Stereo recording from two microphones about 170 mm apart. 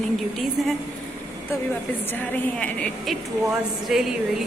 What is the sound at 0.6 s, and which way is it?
Speech, centre (ahead or behind).